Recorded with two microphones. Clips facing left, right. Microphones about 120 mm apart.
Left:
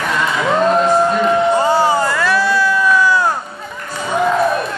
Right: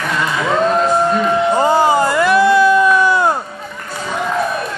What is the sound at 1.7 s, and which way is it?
Crowd, 15° right (ahead or behind).